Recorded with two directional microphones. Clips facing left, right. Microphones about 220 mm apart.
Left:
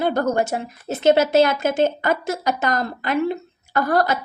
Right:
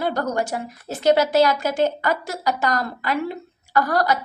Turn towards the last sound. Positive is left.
turn(degrees=25)  # may be behind; listen again after turning